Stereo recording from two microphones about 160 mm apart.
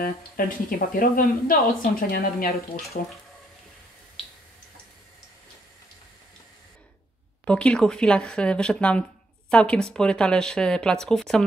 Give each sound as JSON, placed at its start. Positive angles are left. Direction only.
{"t": 0.0, "sound": "speech", "side_deg": 60}
{"t": 7.4, "sound": "speech", "side_deg": 5}